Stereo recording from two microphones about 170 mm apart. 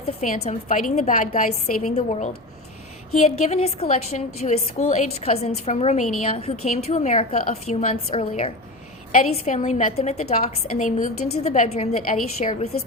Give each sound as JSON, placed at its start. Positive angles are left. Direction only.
{"t": 0.0, "sound": "a woman's voice", "side_deg": 40}
{"t": 9.5, "sound": "a woman's voice", "side_deg": 40}